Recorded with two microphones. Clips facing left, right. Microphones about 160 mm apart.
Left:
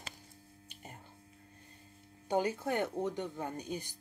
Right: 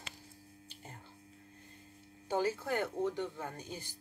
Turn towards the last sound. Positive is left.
turn(degrees=15)  # may be behind; listen again after turning